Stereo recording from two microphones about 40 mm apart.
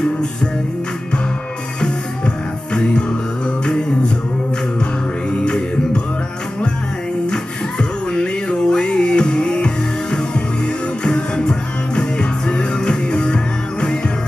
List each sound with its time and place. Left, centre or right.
1.8 s music: left
5.3 s music: left
8.1 s music: left
11.1 s music: centre